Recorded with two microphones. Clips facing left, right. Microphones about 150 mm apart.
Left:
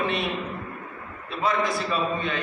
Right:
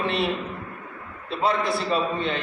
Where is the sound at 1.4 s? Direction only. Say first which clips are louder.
Right 1 dB; 30° right (ahead or behind).